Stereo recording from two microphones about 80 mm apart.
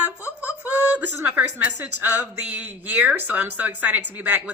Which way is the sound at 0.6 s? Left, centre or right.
Right.